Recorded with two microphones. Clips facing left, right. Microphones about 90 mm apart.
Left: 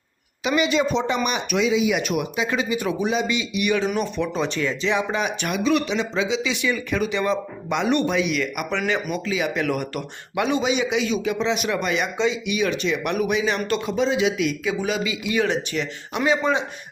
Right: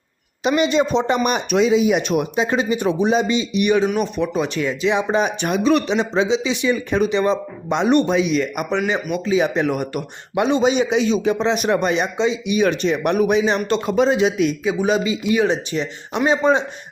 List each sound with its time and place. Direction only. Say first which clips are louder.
0.4 s a man's voice: right 3 dB; 35° right (ahead or behind)
2.0 s speech: right 5 dB; 30° right (ahead or behind); by 4.9 s 15° right (ahead or behind)
4.9 s a man's voice: right 5 dB; 30° right (ahead or behind)
9.6 s a man's voice: right 3 dB; 20° right (ahead or behind); by 12.0 s 35° right (ahead or behind)
12.1 s speech: right 3 dB; 20° right (ahead or behind)
12.5 s a man's voice: right 5 dB; 40° right (ahead or behind)
13.8 s a man's voice: right 5 dB; 50° right (ahead or behind)
14.6 s speech: right 5 dB; 25° right (ahead or behind)
15.3 s speech: right 4 dB; 20° right (ahead or behind)